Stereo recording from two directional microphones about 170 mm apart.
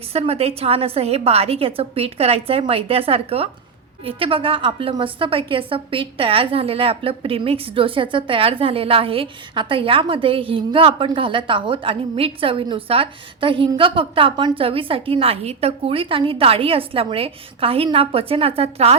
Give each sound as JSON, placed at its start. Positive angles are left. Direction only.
{"t": 0.1, "sound": "a woman's voice", "side_deg": -35}